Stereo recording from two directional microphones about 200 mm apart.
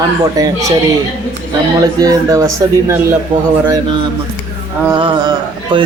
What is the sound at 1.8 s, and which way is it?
Speech, 15° right (ahead or behind).